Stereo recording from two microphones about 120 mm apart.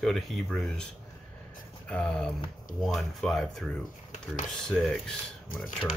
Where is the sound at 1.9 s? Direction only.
5° left (ahead or behind).